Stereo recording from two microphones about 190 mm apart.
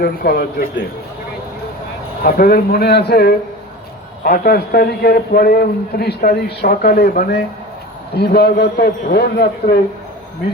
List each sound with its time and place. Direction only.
0.0 s a man's voice: 55° left (ahead or behind)
2.2 s a man's voice: 50° left (ahead or behind)